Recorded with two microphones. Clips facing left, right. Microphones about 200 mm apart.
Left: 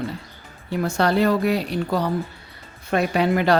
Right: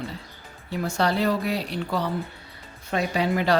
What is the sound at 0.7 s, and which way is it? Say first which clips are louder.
Speech: left 4 dB; 50° left (ahead or behind).